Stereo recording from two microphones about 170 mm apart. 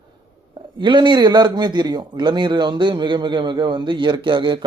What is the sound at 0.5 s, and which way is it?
Speech, 30° right (ahead or behind).